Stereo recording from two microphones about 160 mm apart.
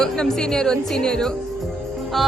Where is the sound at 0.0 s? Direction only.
5° left (ahead or behind).